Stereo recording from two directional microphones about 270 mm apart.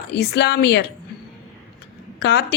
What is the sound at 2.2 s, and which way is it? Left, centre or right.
Speech, left.